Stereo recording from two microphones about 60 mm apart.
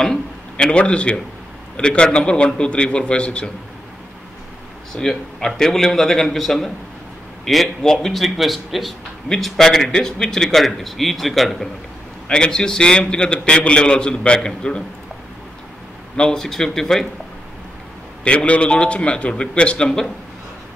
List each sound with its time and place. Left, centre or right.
0.0 s a man's voice: centre
4.9 s a man's voice: centre
12.3 s a man's voice: centre
16.2 s a man's voice: centre
18.2 s a man's voice: centre